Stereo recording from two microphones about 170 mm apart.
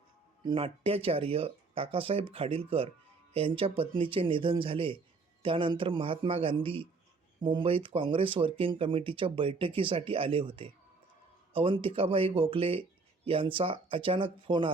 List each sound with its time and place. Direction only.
0.4 s speech: 35° right (ahead or behind)